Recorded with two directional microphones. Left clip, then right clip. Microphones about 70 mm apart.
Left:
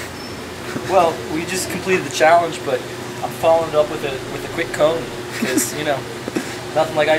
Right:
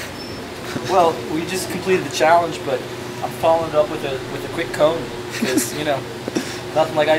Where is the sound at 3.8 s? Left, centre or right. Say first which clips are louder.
Left 1 dB; centre.